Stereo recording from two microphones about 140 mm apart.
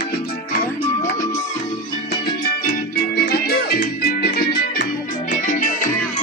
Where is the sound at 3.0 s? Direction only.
90° left.